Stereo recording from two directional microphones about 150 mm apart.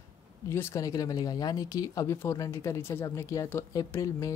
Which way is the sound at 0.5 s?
20° left (ahead or behind).